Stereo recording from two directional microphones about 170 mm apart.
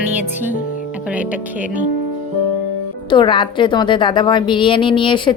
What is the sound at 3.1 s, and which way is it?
A woman's voice, 30° left (ahead or behind).